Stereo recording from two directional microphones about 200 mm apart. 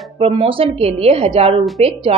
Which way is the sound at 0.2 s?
30° right (ahead or behind).